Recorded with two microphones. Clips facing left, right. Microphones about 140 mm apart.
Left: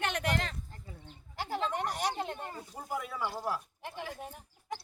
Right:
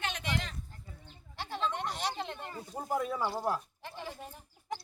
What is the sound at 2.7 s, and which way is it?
Speech, 30° right (ahead or behind).